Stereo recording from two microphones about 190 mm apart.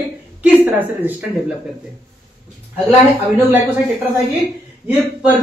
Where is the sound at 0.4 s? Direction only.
10° right (ahead or behind).